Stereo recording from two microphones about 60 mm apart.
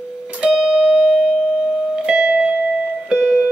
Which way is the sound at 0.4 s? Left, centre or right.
Centre.